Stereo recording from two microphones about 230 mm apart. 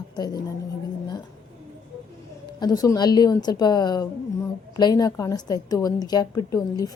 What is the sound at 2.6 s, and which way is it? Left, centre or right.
Speech, centre.